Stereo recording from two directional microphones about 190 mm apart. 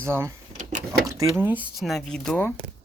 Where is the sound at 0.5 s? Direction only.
40° right (ahead or behind).